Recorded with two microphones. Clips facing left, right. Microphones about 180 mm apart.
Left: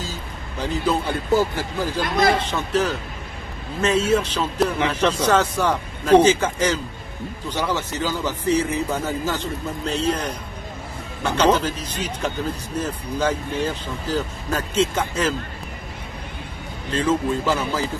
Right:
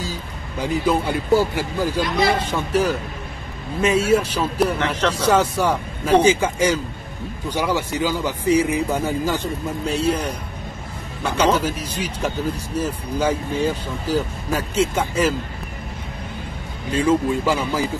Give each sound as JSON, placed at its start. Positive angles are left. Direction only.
{"t": 0.0, "sound": "speech", "side_deg": -10}
{"t": 2.0, "sound": "speech", "side_deg": 55}
{"t": 2.3, "sound": "a man's voice", "side_deg": -10}
{"t": 4.7, "sound": "speech", "side_deg": 10}
{"t": 5.2, "sound": "a man's voice", "side_deg": -10}
{"t": 16.9, "sound": "a man's voice", "side_deg": -10}